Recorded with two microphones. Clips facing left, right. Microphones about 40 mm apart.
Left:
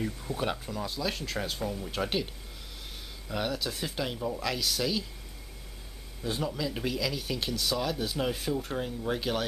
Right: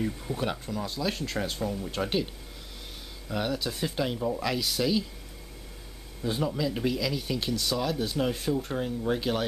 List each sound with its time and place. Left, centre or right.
0.0 s speech: centre
3.3 s speech: centre
6.2 s speech: centre